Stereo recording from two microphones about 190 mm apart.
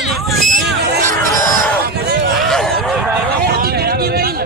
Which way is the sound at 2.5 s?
Centre (ahead or behind).